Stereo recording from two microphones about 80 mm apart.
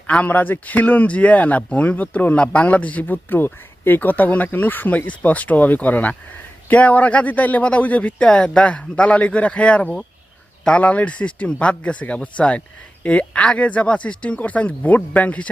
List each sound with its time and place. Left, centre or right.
0.1 s speech: centre